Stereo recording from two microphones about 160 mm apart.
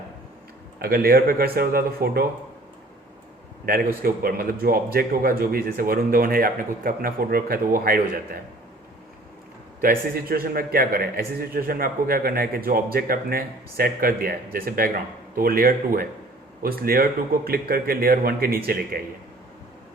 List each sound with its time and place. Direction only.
0.8 s a man's voice: 70° right (ahead or behind)
3.7 s a man's voice: 65° right (ahead or behind)
9.8 s a man's voice: 65° right (ahead or behind)